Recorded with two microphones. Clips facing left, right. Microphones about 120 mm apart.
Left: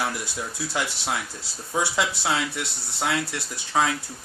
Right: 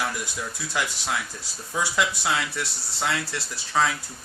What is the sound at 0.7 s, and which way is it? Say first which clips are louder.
Speech: right 1 dB; 30° left (ahead or behind).